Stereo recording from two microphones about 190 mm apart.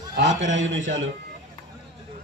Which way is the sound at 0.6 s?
80° right.